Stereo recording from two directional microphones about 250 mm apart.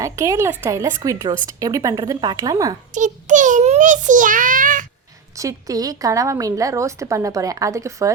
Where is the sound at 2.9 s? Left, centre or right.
Right.